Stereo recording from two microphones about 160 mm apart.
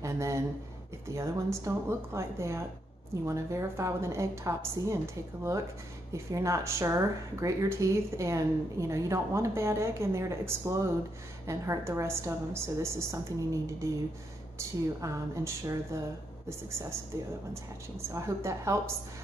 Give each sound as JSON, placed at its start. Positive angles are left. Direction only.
{"t": 0.0, "sound": "a woman's voice", "side_deg": -20}